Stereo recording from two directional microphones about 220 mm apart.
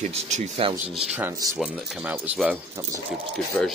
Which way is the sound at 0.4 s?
25° right (ahead or behind).